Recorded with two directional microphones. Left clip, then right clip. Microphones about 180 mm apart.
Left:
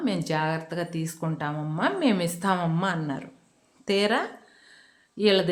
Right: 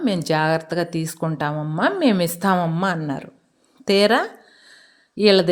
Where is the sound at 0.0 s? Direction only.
40° right (ahead or behind).